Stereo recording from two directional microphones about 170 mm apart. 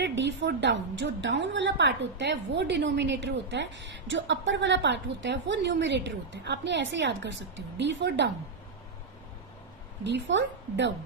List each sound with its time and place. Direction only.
0.0 s a woman's voice: 90° right
10.0 s a woman's voice: 90° right